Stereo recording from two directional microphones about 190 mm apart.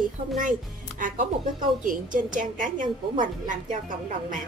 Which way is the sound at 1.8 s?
45° right (ahead or behind).